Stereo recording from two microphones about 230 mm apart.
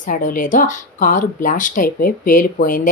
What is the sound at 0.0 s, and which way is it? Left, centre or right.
Speech, left.